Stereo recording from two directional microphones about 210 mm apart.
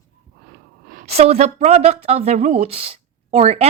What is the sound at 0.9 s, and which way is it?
A woman's voice, 35° right (ahead or behind).